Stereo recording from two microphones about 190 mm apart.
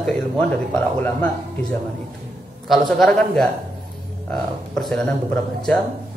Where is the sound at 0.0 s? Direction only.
5° left (ahead or behind).